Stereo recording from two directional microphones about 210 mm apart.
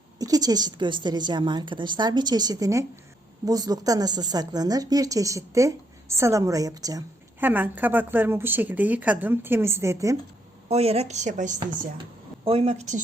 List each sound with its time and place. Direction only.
0.2 s a woman's voice: 20° right (ahead or behind)
10.7 s a woman's voice: 30° right (ahead or behind)